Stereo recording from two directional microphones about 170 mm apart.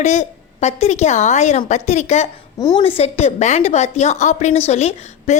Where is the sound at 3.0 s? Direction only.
40° left (ahead or behind).